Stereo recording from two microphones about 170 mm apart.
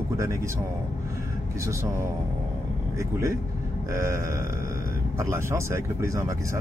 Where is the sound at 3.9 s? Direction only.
15° right (ahead or behind).